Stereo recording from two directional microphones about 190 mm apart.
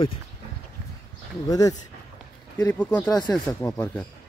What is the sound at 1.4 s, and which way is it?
Speech, 20° left (ahead or behind).